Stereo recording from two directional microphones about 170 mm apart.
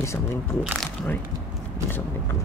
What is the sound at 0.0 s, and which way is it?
Speech, 15° left (ahead or behind).